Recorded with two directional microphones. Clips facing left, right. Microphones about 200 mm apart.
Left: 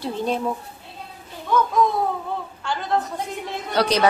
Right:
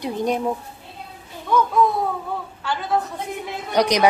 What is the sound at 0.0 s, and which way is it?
Speech, 15° right (ahead or behind).